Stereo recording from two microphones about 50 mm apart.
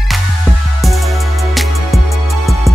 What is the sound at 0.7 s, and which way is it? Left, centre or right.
Music, centre.